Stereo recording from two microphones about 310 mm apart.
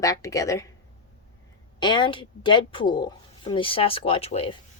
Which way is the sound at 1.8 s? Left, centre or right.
Centre.